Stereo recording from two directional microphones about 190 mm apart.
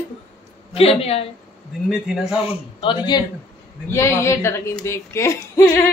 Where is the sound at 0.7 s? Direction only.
30° left (ahead or behind).